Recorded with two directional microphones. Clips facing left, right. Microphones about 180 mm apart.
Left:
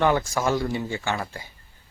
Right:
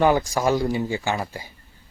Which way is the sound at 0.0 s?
15° right (ahead or behind).